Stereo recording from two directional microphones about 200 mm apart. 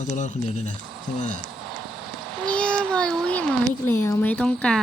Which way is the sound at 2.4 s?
5° left (ahead or behind).